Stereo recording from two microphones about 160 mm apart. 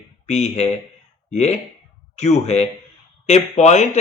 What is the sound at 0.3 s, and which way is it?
Speech, 45° left (ahead or behind).